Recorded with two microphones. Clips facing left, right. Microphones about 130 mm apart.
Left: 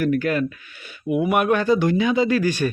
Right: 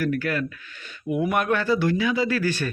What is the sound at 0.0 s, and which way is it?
Speech, 20° left (ahead or behind).